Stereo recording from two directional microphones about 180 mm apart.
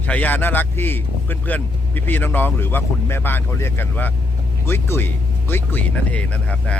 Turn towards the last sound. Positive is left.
turn(degrees=5)  # may be behind; listen again after turning